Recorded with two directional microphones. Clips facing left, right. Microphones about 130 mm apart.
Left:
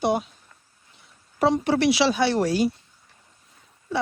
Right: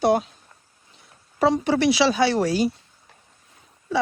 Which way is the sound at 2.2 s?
90° right.